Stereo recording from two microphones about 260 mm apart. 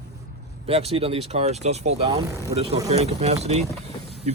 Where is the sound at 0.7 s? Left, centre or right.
Right.